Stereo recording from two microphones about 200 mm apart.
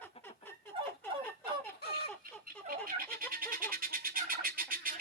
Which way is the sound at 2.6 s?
45° right (ahead or behind).